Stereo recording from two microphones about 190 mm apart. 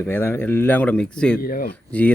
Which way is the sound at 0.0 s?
10° left (ahead or behind).